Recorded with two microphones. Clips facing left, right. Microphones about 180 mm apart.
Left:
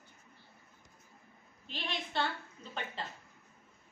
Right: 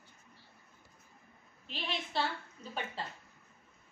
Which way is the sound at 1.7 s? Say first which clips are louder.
Right 1 dB; 5° right (ahead or behind).